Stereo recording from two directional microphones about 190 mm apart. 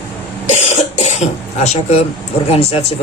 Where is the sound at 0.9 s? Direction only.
35° left (ahead or behind).